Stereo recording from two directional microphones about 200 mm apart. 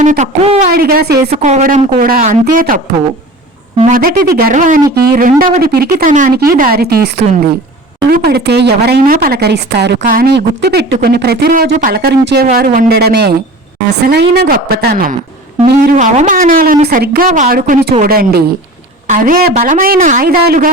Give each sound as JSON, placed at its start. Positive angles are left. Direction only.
{"t": 0.0, "sound": "a woman's voice", "side_deg": -35}
{"t": 1.3, "sound": "a woman's voice", "side_deg": -35}